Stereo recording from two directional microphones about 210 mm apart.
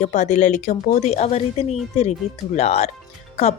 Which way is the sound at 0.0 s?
35° left (ahead or behind).